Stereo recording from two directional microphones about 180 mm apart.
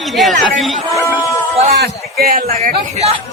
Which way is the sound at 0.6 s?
Centre (ahead or behind).